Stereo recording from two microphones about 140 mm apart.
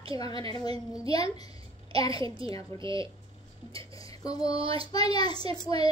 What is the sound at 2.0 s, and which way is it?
Speech, 25° left (ahead or behind).